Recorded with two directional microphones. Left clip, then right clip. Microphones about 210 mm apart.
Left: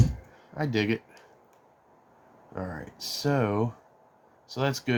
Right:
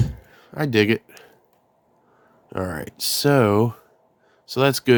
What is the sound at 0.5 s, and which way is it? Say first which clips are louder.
Speech: right 9 dB; 45° right (ahead or behind).